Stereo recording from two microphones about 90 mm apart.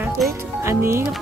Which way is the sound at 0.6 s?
30° right (ahead or behind).